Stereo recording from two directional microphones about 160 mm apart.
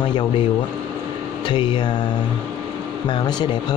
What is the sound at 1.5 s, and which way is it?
Speech, 30° left (ahead or behind).